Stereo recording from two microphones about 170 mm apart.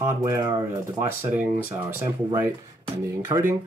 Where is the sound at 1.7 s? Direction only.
10° right (ahead or behind).